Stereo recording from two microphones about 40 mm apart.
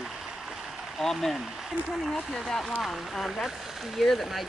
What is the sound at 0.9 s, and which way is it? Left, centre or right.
Speech, centre.